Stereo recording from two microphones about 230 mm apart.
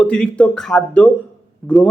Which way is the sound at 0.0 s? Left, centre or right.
Centre.